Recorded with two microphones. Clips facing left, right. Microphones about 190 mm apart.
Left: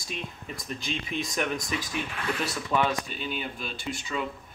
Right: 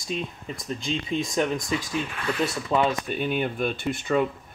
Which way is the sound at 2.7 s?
25° right (ahead or behind).